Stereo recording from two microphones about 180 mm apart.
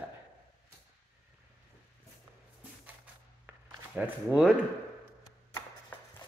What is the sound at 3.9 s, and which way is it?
Speech, 5° right (ahead or behind).